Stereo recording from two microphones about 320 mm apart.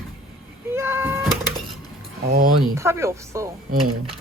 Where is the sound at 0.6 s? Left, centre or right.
Centre.